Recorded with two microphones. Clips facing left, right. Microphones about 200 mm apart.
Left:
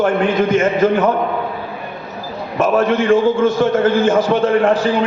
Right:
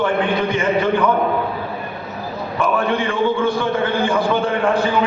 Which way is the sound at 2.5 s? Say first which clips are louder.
Left 5 dB; 45° left (ahead or behind).